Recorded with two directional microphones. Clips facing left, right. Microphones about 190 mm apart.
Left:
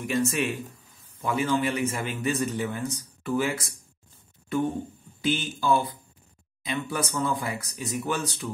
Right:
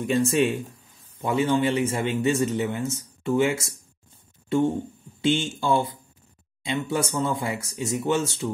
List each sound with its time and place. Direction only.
0.3 s a man's voice: 25° right (ahead or behind)